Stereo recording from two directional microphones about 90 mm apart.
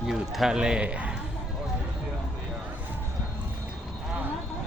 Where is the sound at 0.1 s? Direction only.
5° right (ahead or behind).